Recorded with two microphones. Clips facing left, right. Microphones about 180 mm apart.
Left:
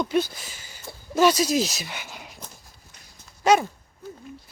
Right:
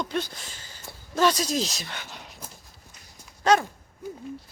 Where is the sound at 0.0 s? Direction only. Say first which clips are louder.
Left 6 dB; 10° left (ahead or behind).